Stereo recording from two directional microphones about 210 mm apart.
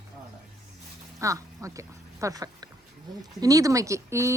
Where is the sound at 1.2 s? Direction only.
15° right (ahead or behind).